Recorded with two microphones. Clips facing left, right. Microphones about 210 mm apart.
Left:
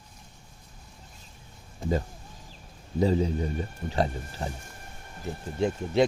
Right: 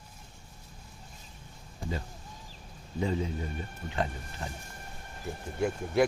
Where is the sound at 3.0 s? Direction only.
35° left (ahead or behind).